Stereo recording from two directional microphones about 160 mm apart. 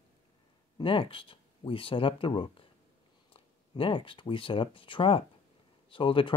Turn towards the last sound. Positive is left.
turn(degrees=35)  # may be behind; listen again after turning